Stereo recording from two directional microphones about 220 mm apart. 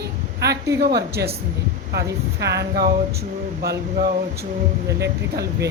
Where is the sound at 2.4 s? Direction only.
50° right (ahead or behind).